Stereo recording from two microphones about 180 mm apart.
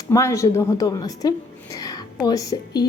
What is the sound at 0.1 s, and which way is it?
A woman's voice, 15° left (ahead or behind).